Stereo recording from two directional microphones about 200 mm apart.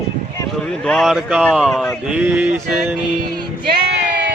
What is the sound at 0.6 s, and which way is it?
Speech, 5° left (ahead or behind).